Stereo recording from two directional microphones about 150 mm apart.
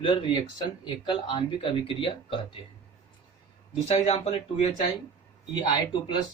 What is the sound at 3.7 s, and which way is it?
Speech, 45° left (ahead or behind).